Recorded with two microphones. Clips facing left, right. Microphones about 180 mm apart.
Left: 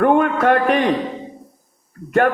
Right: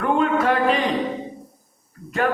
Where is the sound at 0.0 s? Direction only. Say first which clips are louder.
Left 5 dB; 55° left (ahead or behind).